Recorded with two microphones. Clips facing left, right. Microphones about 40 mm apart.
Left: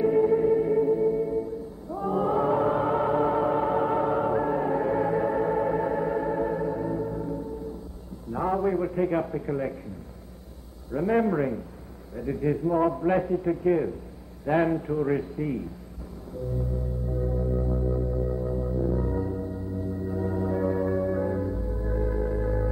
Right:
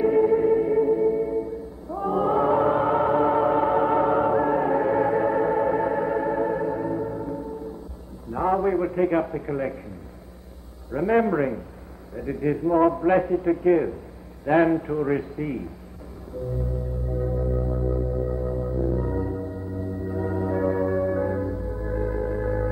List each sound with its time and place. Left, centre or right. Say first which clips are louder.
0.0 s music: right 2 dB; centre
8.3 s a sound: right 3 dB; centre
10.9 s a man's voice: right 3 dB; right
17.1 s music: right 2 dB; centre